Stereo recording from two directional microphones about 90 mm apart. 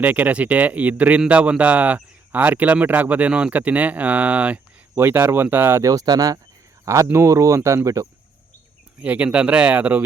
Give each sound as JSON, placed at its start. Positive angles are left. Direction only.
{"t": 0.0, "sound": "speech", "side_deg": -20}
{"t": 5.8, "sound": "speech", "side_deg": -40}
{"t": 9.0, "sound": "speech", "side_deg": -15}